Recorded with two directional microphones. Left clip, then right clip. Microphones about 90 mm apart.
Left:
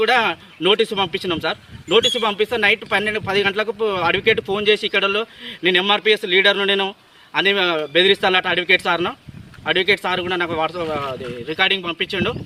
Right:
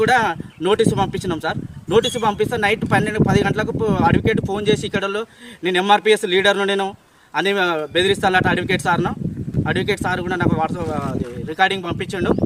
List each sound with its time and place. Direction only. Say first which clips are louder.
0.6 s speech: even; 30° right (ahead or behind)